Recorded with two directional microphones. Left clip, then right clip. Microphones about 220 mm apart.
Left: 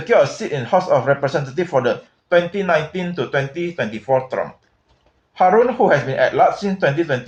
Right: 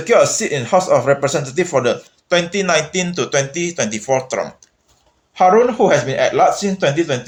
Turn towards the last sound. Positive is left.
turn(degrees=-35)  # may be behind; listen again after turning